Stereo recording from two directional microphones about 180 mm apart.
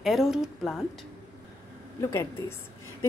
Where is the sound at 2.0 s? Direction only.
15° left (ahead or behind).